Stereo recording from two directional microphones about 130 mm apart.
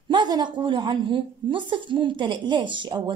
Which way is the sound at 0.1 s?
35° right (ahead or behind).